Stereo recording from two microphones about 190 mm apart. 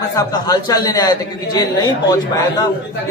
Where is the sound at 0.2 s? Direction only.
20° left (ahead or behind).